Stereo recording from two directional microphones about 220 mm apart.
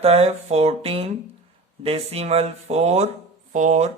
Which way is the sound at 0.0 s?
30° right (ahead or behind).